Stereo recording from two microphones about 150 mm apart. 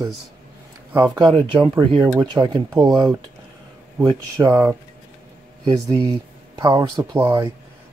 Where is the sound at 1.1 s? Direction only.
30° right (ahead or behind).